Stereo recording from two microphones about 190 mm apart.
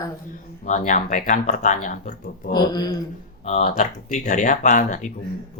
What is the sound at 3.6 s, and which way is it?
Speech, 40° left (ahead or behind).